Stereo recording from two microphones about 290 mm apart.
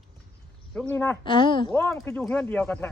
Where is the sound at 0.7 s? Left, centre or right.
Centre.